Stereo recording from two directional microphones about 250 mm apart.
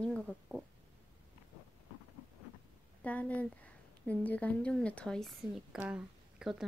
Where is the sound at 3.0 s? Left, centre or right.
Centre.